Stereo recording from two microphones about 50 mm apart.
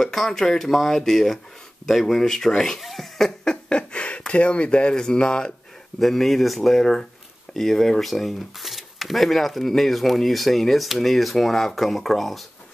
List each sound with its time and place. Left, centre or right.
0.0 s speech: centre
2.8 s cough: centre
3.6 s a sound: left
4.3 s speech: left
5.9 s speech: centre